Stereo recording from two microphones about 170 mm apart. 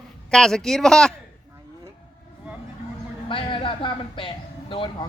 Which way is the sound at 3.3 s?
30° left (ahead or behind).